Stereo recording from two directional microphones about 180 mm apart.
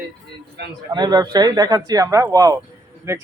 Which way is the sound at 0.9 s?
25° right (ahead or behind).